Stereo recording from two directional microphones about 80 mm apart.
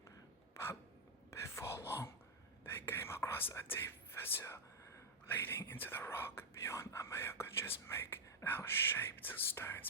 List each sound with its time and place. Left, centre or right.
0.5 s a sound: left
1.3 s whispering: left
5.3 s speech: left